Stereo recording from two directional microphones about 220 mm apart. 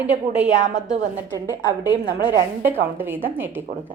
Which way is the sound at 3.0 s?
10° right (ahead or behind).